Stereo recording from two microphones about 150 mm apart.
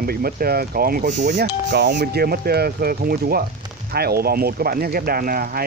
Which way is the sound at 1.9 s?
90° right.